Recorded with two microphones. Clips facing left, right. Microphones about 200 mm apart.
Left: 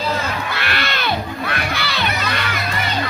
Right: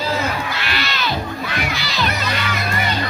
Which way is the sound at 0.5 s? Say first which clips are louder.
Left 1 dB; 60° left (ahead or behind).